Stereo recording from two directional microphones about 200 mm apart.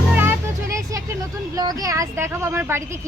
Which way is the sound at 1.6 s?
20° right (ahead or behind).